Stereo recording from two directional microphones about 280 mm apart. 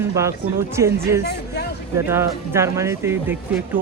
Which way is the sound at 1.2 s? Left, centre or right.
Left.